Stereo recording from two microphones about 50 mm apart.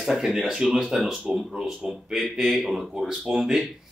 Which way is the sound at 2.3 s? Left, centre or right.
Centre.